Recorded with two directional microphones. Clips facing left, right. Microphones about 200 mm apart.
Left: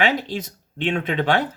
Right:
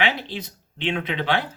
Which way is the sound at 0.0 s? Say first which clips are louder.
Left 4 dB; 45° left (ahead or behind).